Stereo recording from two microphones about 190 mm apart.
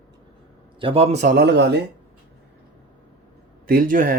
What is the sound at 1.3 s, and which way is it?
Speech, 65° right (ahead or behind).